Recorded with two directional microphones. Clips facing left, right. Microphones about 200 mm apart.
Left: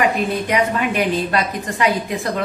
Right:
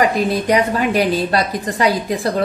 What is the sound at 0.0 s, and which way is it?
A woman's voice, 35° right (ahead or behind).